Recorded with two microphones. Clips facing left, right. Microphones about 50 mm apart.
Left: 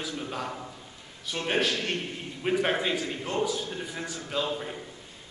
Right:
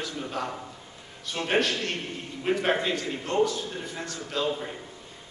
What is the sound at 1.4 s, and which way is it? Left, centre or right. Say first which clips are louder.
Speech: even; centre.